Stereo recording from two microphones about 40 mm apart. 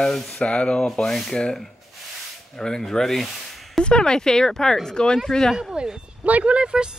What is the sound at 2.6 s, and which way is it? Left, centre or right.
Speech, centre.